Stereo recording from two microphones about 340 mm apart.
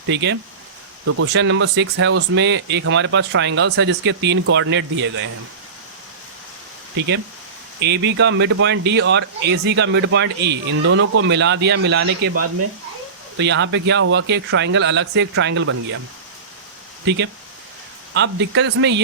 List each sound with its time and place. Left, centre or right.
0.1 s speech: right
7.8 s speech: right
13.4 s speech: right
17.1 s speech: right